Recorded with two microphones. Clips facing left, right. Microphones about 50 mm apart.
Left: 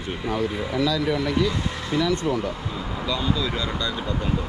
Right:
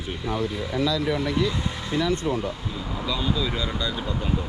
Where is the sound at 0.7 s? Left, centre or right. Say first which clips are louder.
Left 1 dB; left.